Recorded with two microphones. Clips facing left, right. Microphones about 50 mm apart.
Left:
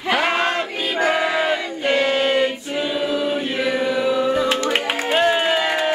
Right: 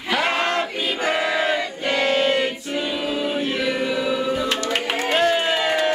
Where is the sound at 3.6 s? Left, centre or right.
Centre.